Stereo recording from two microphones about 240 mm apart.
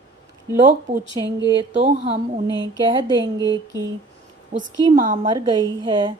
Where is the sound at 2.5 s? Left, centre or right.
Centre.